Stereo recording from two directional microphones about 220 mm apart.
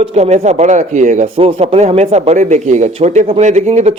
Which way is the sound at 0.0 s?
30° right (ahead or behind).